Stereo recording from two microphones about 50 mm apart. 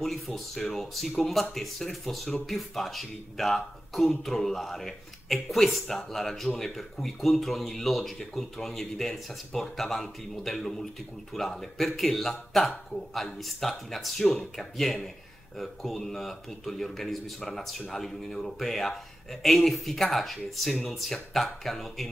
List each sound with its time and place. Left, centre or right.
0.0 s speech: centre